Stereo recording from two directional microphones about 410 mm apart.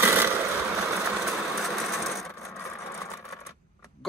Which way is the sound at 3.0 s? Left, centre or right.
Centre.